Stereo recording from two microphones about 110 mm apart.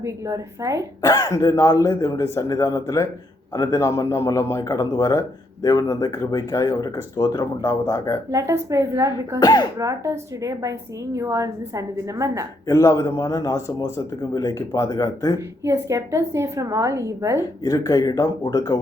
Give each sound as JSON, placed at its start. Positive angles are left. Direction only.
{"t": 0.0, "sound": "a woman's voice", "side_deg": -30}
{"t": 1.0, "sound": "speech", "side_deg": 30}
{"t": 8.3, "sound": "a woman's voice", "side_deg": -30}
{"t": 9.4, "sound": "speech", "side_deg": 35}
{"t": 9.7, "sound": "a woman's voice", "side_deg": -25}
{"t": 12.6, "sound": "speech", "side_deg": 30}
{"t": 15.4, "sound": "a woman's voice", "side_deg": -25}
{"t": 17.6, "sound": "speech", "side_deg": 30}